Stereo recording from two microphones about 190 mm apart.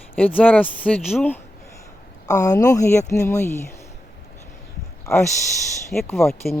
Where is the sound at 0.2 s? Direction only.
10° left (ahead or behind).